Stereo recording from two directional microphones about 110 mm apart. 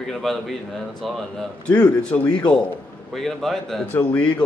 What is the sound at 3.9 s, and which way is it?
Speech, 15° left (ahead or behind).